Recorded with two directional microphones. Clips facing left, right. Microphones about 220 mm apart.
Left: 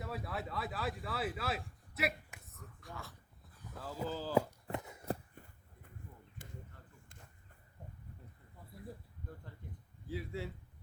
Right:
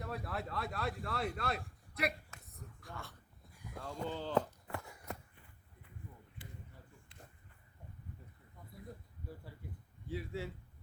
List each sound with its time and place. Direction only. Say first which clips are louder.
0.0 s speech: even; centre (ahead or behind)
3.5 s cattle: right 1 dB; 10° right (ahead or behind)
3.8 s speech: left 1 dB; 5° left (ahead or behind)
4.7 s walk: left 6 dB; 20° left (ahead or behind)
5.3 s a sound: left 6 dB; 45° left (ahead or behind)
9.2 s a sound: right 1 dB; 5° right (ahead or behind)
10.1 s speech: even; centre (ahead or behind)